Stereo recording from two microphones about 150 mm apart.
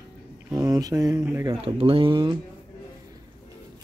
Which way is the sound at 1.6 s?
35° right (ahead or behind).